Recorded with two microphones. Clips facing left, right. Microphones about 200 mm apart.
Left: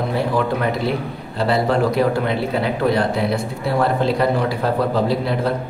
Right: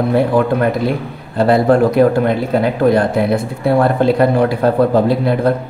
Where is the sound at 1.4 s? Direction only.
50° right (ahead or behind).